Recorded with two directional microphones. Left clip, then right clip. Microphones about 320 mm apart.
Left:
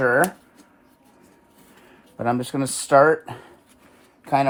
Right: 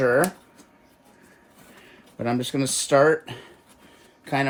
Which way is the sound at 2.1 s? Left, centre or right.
Centre.